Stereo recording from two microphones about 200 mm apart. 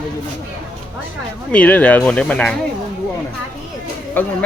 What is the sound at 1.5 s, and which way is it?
Speech, 5° left (ahead or behind).